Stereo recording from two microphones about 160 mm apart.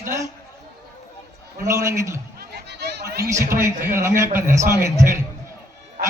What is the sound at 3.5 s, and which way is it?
A man's voice, 15° right (ahead or behind).